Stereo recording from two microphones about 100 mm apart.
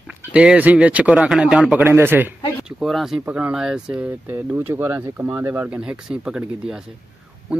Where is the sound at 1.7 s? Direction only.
20° right (ahead or behind).